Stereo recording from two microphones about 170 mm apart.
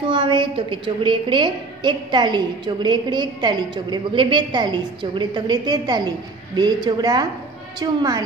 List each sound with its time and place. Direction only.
0.0 s a woman's voice: 30° right (ahead or behind)